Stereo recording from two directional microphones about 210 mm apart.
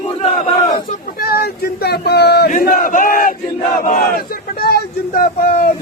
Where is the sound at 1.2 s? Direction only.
50° left (ahead or behind).